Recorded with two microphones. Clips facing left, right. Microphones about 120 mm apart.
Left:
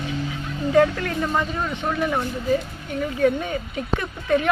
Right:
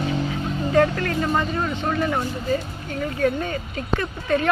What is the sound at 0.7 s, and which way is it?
Speech, 10° left (ahead or behind).